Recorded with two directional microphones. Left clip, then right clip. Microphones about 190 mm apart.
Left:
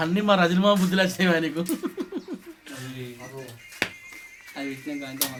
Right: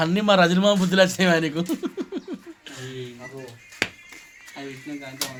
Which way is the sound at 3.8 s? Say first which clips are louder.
Right 2 dB; 45° right (ahead or behind).